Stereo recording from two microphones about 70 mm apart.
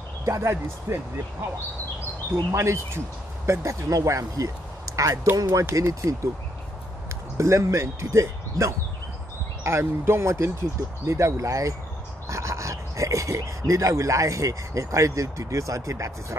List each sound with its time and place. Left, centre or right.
0.2 s speech: right
2.5 s speech: right
7.3 s speech: right